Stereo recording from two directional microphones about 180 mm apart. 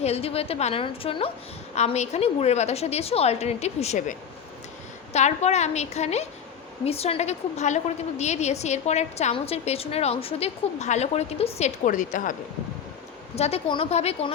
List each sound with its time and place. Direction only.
0.0 s a woman's voice: 35° left (ahead or behind)
13.3 s a woman's voice: 35° left (ahead or behind)